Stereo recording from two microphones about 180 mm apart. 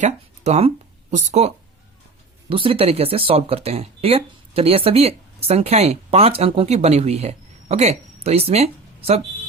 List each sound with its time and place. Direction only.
0.0 s speech: 35° right (ahead or behind)